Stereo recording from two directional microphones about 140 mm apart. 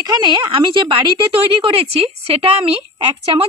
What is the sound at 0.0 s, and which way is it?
A woman's voice, 30° right (ahead or behind).